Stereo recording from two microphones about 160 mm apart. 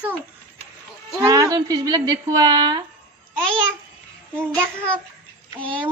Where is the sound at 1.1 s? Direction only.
25° right (ahead or behind).